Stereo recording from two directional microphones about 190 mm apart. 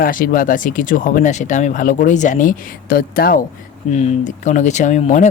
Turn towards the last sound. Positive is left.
turn(degrees=40)  # may be behind; listen again after turning